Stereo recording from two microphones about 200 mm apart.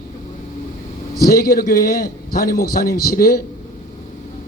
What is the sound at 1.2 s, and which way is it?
A man's voice, 50° left (ahead or behind).